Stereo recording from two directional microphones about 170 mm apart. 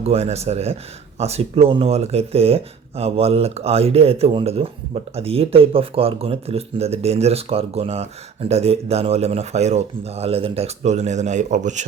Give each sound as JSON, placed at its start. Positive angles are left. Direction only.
{"t": 0.0, "sound": "speech", "side_deg": -40}